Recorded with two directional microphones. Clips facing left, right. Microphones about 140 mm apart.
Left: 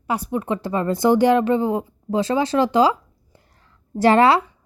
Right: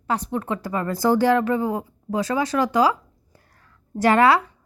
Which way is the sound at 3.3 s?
25° left (ahead or behind).